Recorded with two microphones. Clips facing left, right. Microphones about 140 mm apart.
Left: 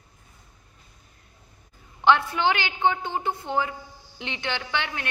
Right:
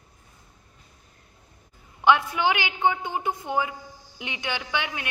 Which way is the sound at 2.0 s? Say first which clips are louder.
Even; 10° right (ahead or behind).